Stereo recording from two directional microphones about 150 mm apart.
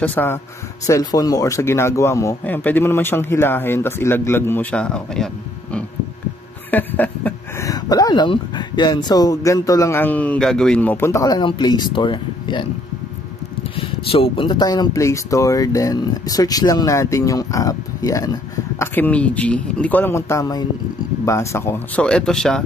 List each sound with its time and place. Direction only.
0.0 s a man's voice: 15° left (ahead or behind)
6.7 s a sound: 10° left (ahead or behind)
7.6 s speech: 25° left (ahead or behind)
13.7 s speech: 35° left (ahead or behind); by 18.9 s 20° left (ahead or behind)
18.9 s a man's voice: 10° left (ahead or behind)